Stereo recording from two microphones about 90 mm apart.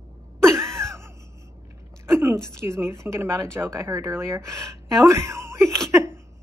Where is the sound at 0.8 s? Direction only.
35° right (ahead or behind).